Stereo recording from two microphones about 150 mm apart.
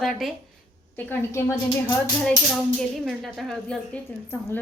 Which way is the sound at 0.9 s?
10° left (ahead or behind).